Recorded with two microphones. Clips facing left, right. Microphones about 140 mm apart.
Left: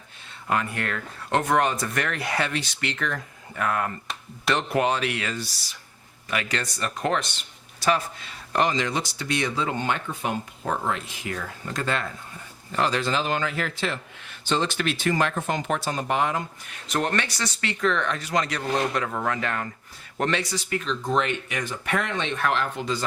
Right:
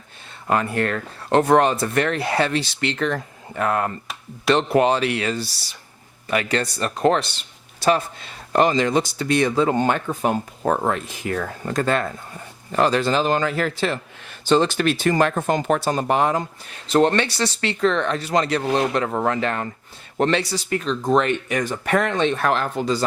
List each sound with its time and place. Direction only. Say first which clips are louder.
0.4 s speech: right 6 dB; 35° right (ahead or behind)
8.5 s speech: right 6 dB; 45° right (ahead or behind)